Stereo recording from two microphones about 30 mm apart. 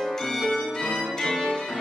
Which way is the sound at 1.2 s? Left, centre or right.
Centre.